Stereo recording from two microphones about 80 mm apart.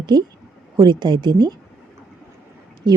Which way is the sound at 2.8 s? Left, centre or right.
Right.